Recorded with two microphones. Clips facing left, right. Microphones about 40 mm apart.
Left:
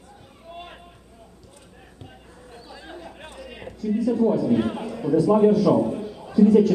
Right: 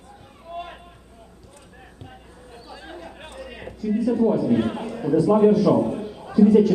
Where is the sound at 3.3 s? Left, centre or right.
Centre.